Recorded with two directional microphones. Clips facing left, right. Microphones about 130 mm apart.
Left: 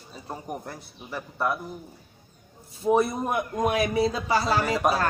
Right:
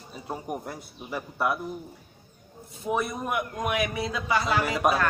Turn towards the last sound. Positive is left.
turn(degrees=35)  # may be behind; listen again after turning